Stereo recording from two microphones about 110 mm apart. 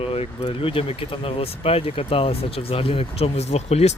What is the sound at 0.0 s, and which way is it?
Speech, 60° left (ahead or behind).